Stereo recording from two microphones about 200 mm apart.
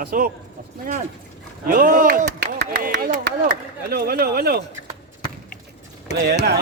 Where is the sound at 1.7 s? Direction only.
45° right (ahead or behind).